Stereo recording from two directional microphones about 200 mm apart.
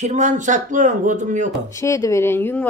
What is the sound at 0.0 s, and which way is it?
Speech, 35° right (ahead or behind).